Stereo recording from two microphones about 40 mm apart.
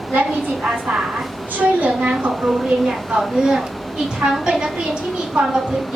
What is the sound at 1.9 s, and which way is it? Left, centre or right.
Speech, right.